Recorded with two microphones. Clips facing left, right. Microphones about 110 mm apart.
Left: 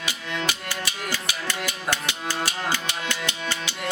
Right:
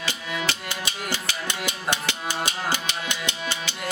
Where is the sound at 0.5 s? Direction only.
15° left (ahead or behind).